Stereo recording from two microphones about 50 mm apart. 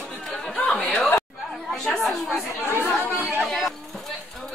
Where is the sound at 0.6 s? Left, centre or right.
Centre.